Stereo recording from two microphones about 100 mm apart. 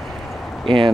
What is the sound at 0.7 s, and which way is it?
Speech, 55° right (ahead or behind).